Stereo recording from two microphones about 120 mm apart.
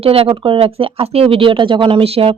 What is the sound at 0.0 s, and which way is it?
Speech, 55° right (ahead or behind).